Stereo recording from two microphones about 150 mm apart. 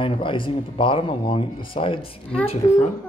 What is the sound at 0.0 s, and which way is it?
A child's voice, 35° left (ahead or behind).